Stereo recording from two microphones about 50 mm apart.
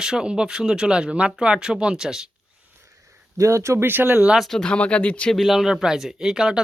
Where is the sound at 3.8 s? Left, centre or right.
Right.